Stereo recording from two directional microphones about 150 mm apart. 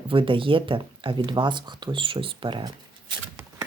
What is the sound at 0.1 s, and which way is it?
Speech, 35° right (ahead or behind).